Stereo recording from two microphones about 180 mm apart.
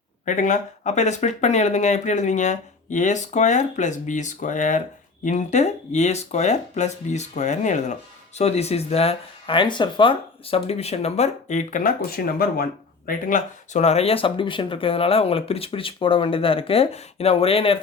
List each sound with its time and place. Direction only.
0.3 s speech: 45° left (ahead or behind)